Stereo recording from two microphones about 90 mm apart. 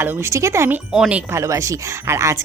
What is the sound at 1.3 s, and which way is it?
A woman's voice, 35° right (ahead or behind).